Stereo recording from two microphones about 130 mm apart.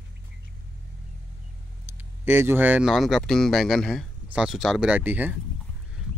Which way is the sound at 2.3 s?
15° right (ahead or behind).